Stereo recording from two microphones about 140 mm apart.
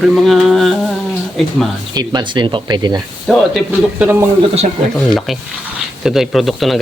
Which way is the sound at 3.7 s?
15° right (ahead or behind).